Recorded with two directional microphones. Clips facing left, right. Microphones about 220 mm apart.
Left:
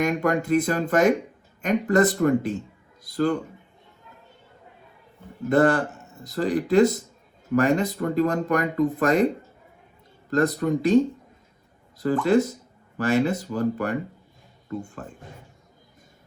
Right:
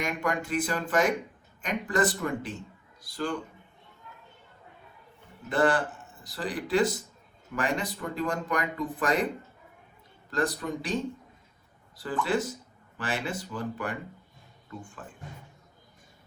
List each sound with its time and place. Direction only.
0.0 s speech: 45° left (ahead or behind)
5.5 s speech: 45° left (ahead or behind)